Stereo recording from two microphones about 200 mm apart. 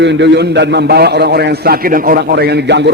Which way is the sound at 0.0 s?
60° right (ahead or behind).